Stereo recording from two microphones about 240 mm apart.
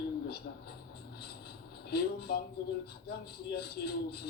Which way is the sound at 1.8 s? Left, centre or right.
Left.